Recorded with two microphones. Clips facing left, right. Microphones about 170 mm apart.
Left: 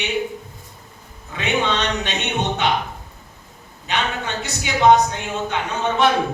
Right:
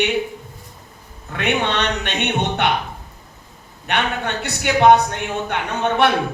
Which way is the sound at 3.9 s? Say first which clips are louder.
Right 2 dB; 60° right (ahead or behind).